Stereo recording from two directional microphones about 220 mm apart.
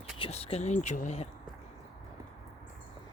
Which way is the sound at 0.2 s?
25° left (ahead or behind).